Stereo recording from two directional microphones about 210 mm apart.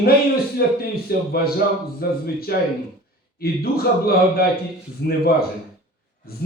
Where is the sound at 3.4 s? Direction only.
45° left (ahead or behind).